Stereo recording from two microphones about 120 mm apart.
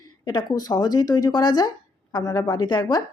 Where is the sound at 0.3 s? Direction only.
35° left (ahead or behind).